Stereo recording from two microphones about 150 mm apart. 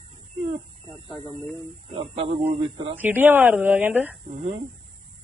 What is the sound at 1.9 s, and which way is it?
Speech, 35° right (ahead or behind).